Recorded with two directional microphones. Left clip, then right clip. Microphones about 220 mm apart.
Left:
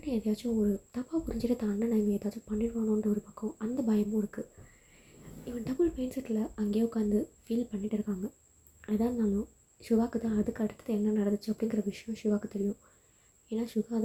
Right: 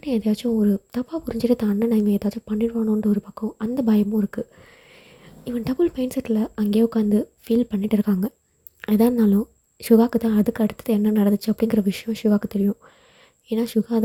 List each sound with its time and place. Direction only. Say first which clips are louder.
0.0 s a woman's voice: right 10 dB; 45° right (ahead or behind)
5.5 s a woman's voice: right 9 dB; 45° right (ahead or behind)